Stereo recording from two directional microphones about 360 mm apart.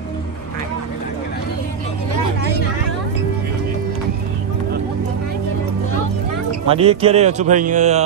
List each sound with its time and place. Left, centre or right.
6.7 s speech: centre